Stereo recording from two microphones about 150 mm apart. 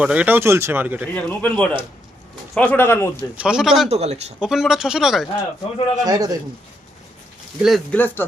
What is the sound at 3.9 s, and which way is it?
Speech, 45° right (ahead or behind).